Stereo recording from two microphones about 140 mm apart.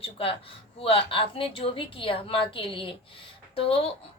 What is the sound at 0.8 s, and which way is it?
Speech, 40° left (ahead or behind).